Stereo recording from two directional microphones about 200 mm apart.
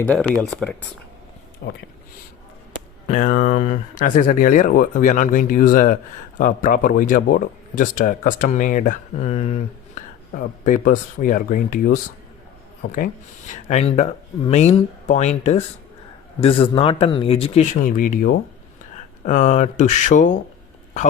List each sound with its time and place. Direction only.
0.0 s speech: 5° left (ahead or behind)
1.6 s speech: 55° left (ahead or behind)
3.1 s speech: 40° left (ahead or behind)
10.3 s speech: 45° left (ahead or behind)